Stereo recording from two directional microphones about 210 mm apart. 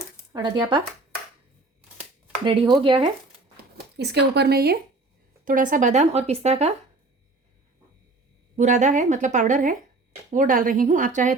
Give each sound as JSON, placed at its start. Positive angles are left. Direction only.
{"t": 0.3, "sound": "speech", "side_deg": -20}
{"t": 2.4, "sound": "speech", "side_deg": -25}
{"t": 3.6, "sound": "speech", "side_deg": -50}
{"t": 8.5, "sound": "speech", "side_deg": -35}